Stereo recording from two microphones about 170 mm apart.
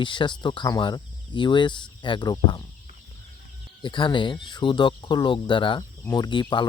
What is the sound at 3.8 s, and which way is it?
Speech, 30° left (ahead or behind).